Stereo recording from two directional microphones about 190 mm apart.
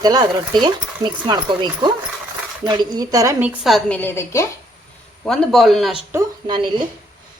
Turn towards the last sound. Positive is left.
turn(degrees=-20)  # may be behind; listen again after turning